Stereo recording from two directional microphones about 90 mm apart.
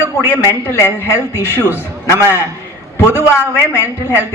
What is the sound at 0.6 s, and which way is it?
A man's voice, 25° left (ahead or behind).